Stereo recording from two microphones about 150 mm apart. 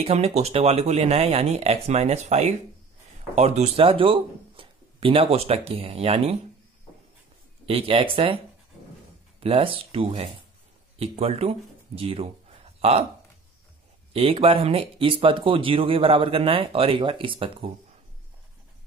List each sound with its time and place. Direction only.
0.0 s speech: 45° right (ahead or behind)
7.6 s speech: 40° right (ahead or behind)
9.4 s speech: 40° right (ahead or behind)
14.1 s speech: 40° right (ahead or behind)